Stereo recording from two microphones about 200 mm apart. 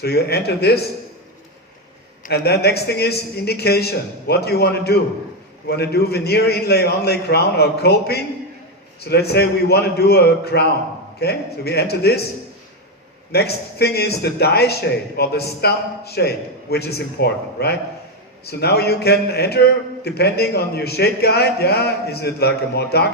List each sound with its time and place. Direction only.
0.0 s a man's voice: 55° left (ahead or behind)
2.2 s a man's voice: 55° left (ahead or behind)
13.3 s a man's voice: 55° left (ahead or behind)